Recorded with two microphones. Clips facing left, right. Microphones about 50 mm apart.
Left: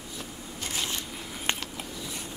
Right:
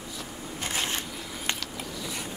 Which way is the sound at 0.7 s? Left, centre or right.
Right.